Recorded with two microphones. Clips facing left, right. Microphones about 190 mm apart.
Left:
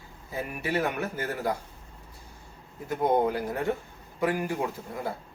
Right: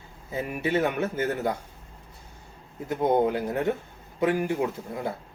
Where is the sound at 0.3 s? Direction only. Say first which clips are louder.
Right 4 dB; 25° right (ahead or behind).